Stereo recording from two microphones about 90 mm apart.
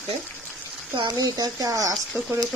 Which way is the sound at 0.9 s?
55° right (ahead or behind).